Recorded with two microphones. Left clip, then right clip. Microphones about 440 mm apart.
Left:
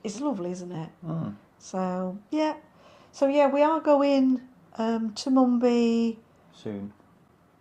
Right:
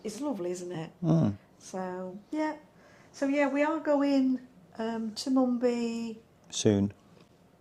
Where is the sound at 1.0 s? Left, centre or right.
Right.